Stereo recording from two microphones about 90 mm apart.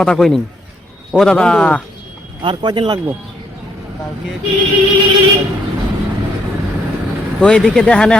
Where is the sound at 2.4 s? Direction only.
65° right (ahead or behind).